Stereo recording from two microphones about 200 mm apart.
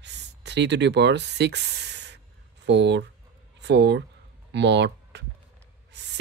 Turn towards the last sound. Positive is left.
turn(degrees=-60)  # may be behind; listen again after turning